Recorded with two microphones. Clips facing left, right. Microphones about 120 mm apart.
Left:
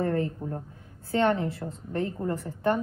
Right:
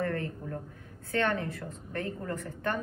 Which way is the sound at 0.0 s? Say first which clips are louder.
Left 5 dB; 20° left (ahead or behind).